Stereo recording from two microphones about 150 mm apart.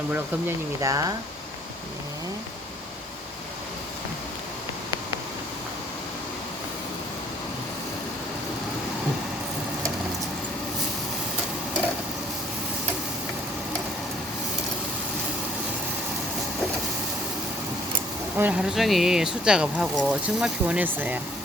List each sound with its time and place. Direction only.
0.1 s speech: 20° right (ahead or behind)
18.3 s speech: 10° right (ahead or behind)